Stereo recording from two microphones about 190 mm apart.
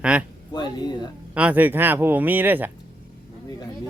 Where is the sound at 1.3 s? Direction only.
10° right (ahead or behind).